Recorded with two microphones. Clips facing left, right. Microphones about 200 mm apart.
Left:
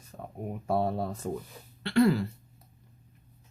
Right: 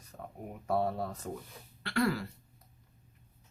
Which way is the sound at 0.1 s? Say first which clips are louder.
Left 3 dB; 25° left (ahead or behind).